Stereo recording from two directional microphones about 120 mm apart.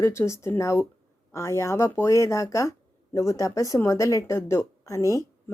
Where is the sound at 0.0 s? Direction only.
25° left (ahead or behind).